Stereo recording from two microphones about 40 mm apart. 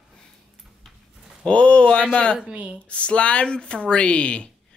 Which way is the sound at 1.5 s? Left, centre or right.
Left.